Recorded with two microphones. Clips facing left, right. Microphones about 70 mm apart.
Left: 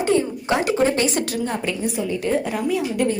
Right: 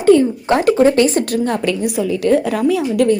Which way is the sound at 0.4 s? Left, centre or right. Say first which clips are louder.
Right 6 dB; right.